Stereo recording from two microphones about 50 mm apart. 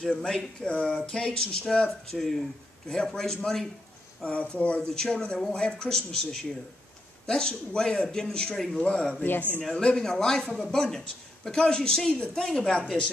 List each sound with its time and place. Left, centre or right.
0.1 s speech: centre
0.7 s speech: left
4.2 s speech: left
4.8 s speech: centre
8.5 s speech: centre
8.8 s speech: centre
9.2 s speech: left
9.6 s speech: centre